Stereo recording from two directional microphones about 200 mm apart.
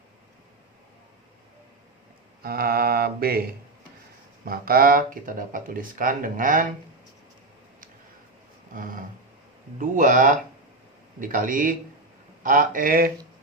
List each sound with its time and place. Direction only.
2.4 s speech: 50° right (ahead or behind)
4.4 s speech: 45° right (ahead or behind)
8.7 s a sound: 45° right (ahead or behind)
9.7 s speech: 40° right (ahead or behind)